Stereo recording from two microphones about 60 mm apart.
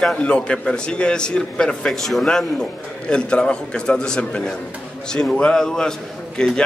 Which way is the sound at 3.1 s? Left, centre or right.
Centre.